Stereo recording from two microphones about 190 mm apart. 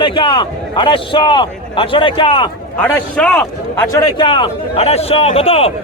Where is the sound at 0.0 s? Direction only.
25° left (ahead or behind).